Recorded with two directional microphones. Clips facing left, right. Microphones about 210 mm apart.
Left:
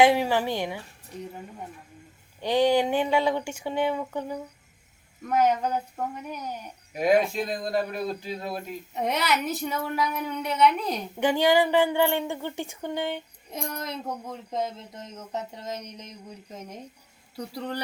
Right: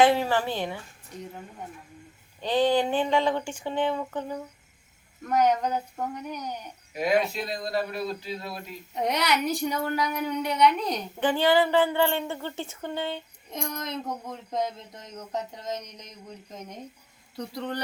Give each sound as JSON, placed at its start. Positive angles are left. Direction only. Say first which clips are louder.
{"t": 0.0, "sound": "speech", "louder": "left 1 dB", "side_deg": 10}
{"t": 2.4, "sound": "a woman's voice", "louder": "left 1 dB", "side_deg": 10}
{"t": 6.9, "sound": "speech", "louder": "left 3 dB", "side_deg": 45}
{"t": 9.0, "sound": "a woman's voice", "louder": "right 1 dB", "side_deg": 0}